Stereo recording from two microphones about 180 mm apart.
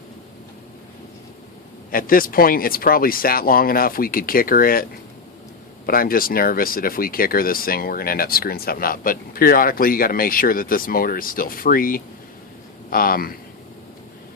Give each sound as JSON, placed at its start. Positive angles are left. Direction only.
{"t": 1.9, "sound": "speech", "side_deg": 50}